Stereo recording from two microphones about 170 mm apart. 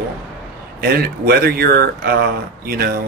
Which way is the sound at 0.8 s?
65° right (ahead or behind).